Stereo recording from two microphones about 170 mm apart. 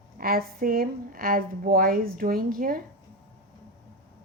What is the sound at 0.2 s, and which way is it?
A woman's voice, 60° right (ahead or behind).